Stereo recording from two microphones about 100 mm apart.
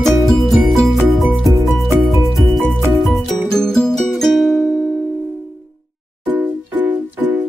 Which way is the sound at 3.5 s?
5° left (ahead or behind).